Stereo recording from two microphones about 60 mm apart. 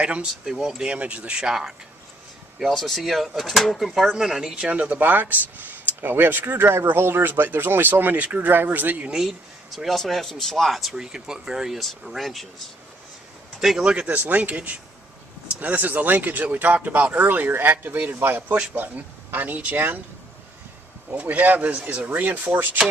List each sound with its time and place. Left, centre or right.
0.0 s speech: centre
2.6 s speech: centre; by 9.1 s right
9.1 s speech: centre
9.8 s speech: centre
13.6 s speech: centre
14.1 s speech: right
21.1 s speech: right